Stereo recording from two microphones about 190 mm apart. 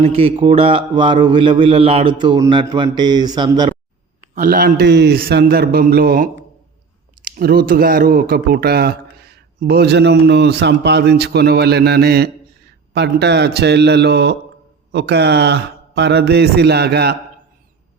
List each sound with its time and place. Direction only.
0.0 s speech: 30° right (ahead or behind)
4.4 s a man's voice: 45° right (ahead or behind)